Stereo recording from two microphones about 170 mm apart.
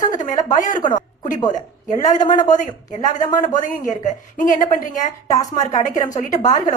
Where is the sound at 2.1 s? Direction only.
25° left (ahead or behind).